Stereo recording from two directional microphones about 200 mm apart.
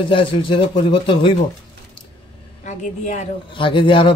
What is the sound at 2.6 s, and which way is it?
Speech, 35° left (ahead or behind).